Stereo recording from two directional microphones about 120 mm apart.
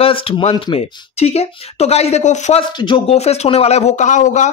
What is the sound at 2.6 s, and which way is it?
Speech, 45° left (ahead or behind).